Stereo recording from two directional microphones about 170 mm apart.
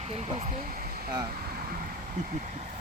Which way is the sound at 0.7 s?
60° right (ahead or behind).